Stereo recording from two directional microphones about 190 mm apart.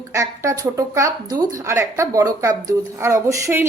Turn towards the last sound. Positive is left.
turn(degrees=-15)  # may be behind; listen again after turning